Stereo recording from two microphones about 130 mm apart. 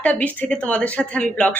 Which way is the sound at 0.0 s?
10° left (ahead or behind).